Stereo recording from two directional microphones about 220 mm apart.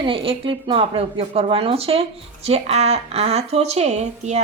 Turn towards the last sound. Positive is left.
turn(degrees=-30)  # may be behind; listen again after turning